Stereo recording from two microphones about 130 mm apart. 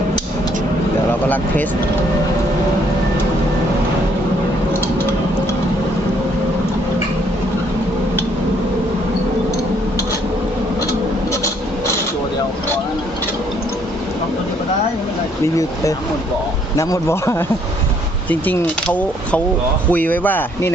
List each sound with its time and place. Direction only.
15.5 s a man's voice: 25° left (ahead or behind)